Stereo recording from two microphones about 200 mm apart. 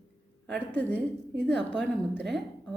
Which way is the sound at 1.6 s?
5° left (ahead or behind).